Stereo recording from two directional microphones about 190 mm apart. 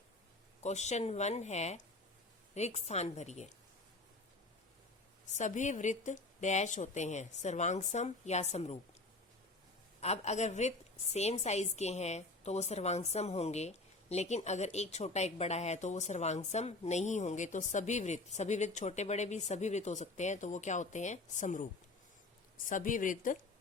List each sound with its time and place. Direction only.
0.6 s a woman's voice: 35° left (ahead or behind)
5.4 s a woman's voice: 40° left (ahead or behind)
10.0 s a woman's voice: 35° left (ahead or behind)